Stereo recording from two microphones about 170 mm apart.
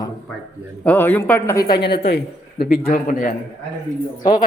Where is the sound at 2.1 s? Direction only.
70° left (ahead or behind); by 3.3 s 55° left (ahead or behind).